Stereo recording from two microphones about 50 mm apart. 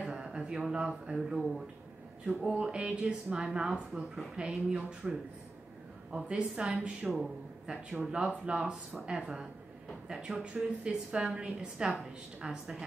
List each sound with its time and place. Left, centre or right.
0.0 s a sound: centre
2.2 s a woman's voice: right
6.1 s a woman's voice: centre